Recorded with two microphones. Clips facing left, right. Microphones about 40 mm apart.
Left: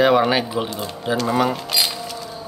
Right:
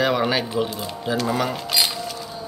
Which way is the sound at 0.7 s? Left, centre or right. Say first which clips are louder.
Left 2 dB; centre.